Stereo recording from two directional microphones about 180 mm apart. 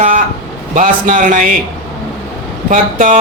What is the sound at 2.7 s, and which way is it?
Speech, 45° right (ahead or behind).